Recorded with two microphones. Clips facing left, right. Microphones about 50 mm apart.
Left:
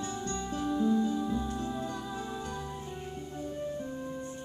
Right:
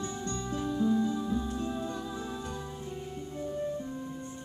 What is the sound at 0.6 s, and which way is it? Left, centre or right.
Music, centre.